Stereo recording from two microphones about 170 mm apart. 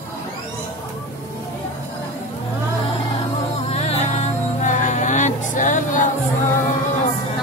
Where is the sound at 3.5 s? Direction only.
35° left (ahead or behind).